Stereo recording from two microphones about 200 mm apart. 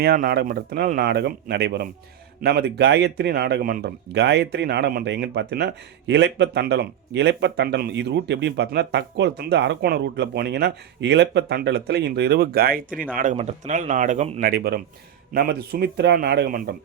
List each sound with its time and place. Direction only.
0.0 s a man's voice: 50° right (ahead or behind)